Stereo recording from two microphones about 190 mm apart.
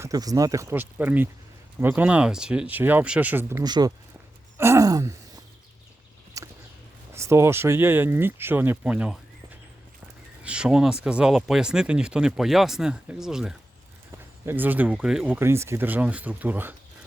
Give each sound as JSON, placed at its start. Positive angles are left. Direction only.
{"t": 0.0, "sound": "speech", "side_deg": -20}
{"t": 3.6, "sound": "speech", "side_deg": -20}
{"t": 6.4, "sound": "a sound", "side_deg": -15}
{"t": 7.1, "sound": "speech", "side_deg": -15}
{"t": 10.4, "sound": "speech", "side_deg": -5}